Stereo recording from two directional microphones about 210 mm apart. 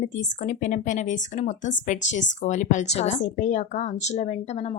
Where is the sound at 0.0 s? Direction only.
35° left (ahead or behind).